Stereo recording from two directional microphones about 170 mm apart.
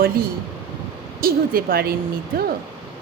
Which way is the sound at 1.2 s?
60° right (ahead or behind).